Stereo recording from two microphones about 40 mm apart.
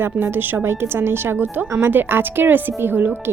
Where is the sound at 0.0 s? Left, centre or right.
Right.